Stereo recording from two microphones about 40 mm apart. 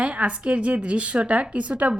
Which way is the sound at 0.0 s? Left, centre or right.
Right.